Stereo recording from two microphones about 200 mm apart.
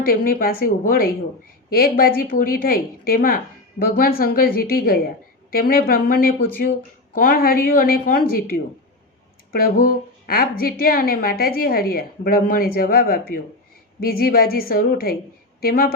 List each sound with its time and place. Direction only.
0.0 s a woman's voice: 45° left (ahead or behind)